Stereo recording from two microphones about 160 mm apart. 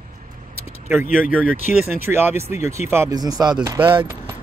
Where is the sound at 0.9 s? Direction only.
10° right (ahead or behind).